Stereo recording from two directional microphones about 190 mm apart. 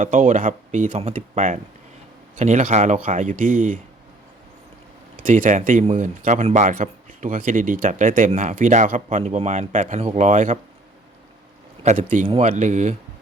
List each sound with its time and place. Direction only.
0.0 s speech: 45° right (ahead or behind)
5.2 s speech: 45° right (ahead or behind)
11.8 s speech: 35° right (ahead or behind)